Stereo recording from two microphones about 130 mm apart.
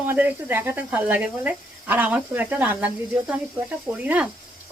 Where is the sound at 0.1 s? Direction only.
15° right (ahead or behind).